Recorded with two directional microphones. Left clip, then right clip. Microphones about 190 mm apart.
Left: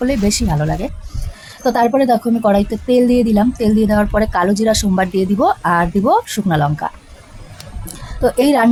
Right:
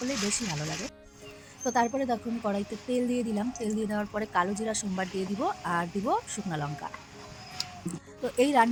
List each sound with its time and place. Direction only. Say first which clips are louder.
0.3 s speech: left 14 dB; 20° right (ahead or behind)
8.2 s speech: left 11 dB; 15° right (ahead or behind)